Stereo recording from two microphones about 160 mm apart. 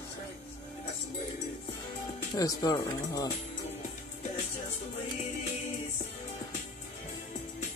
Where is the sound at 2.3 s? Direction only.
20° left (ahead or behind).